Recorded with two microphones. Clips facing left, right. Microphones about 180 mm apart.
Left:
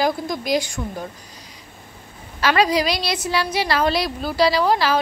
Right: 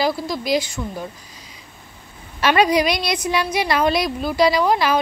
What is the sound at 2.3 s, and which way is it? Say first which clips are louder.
A woman's voice: right 2 dB; 20° right (ahead or behind).